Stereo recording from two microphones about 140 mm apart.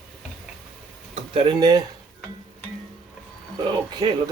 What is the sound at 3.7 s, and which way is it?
Speech, 30° right (ahead or behind).